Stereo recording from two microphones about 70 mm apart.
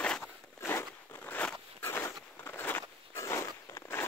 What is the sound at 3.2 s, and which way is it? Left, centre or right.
Walk, left.